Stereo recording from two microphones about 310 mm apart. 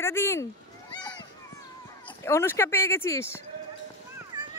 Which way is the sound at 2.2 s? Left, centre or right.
Centre.